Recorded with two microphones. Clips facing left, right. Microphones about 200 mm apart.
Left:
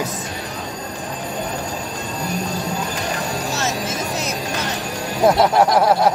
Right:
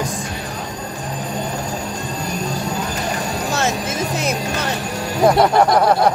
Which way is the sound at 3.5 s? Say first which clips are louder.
Right 3 dB; 55° right (ahead or behind).